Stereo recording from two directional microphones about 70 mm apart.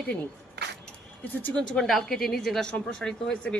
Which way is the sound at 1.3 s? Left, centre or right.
Left.